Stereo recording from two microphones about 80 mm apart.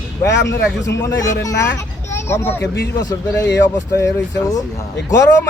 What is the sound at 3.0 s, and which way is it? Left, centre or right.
Speech, left.